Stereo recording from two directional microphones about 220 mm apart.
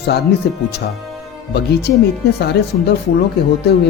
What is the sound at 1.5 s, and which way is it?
Speech, 50° left (ahead or behind).